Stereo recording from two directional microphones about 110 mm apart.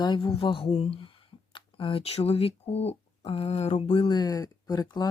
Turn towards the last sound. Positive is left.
turn(degrees=40)  # may be behind; listen again after turning